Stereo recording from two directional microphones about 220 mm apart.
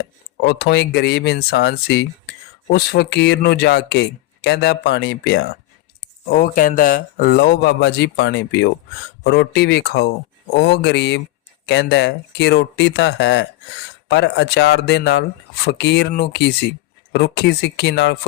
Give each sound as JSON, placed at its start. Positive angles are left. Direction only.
{"t": 0.4, "sound": "speech", "side_deg": 45}